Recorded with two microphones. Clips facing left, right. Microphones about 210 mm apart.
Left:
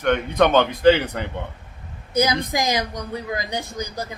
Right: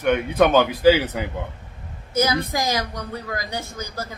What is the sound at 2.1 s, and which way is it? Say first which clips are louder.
A woman's voice: left 1 dB; 15° left (ahead or behind).